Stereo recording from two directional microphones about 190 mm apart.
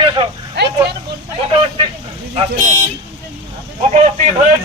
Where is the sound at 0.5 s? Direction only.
65° right (ahead or behind).